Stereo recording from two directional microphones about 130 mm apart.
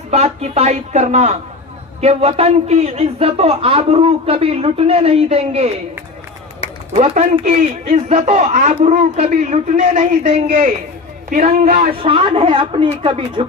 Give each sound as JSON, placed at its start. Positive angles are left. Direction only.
{"t": 0.1, "sound": "speech", "side_deg": -55}
{"t": 6.9, "sound": "a man's voice", "side_deg": -60}
{"t": 12.0, "sound": "a woman's voice", "side_deg": -45}